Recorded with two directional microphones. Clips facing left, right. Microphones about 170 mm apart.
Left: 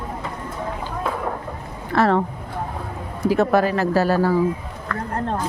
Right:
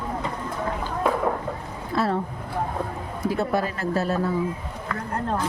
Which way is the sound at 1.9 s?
75° left (ahead or behind).